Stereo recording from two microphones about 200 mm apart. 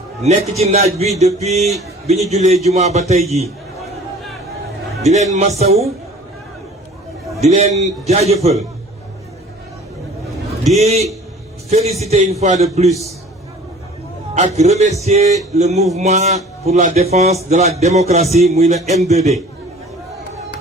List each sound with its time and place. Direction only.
0.2 s a man's voice: 30° right (ahead or behind)
5.0 s a man's voice: 35° right (ahead or behind)
7.5 s a man's voice: 35° right (ahead or behind)
10.8 s a man's voice: 30° right (ahead or behind)
14.3 s a man's voice: 35° right (ahead or behind)